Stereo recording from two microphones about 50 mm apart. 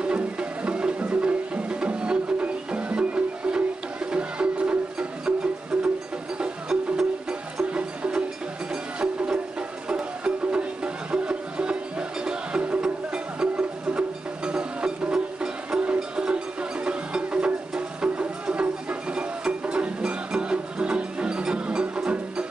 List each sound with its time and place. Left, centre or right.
0.0 s music: right
7.7 s music: right